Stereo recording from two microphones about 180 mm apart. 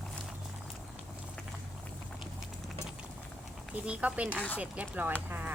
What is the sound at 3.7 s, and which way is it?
A woman's voice, 10° right (ahead or behind).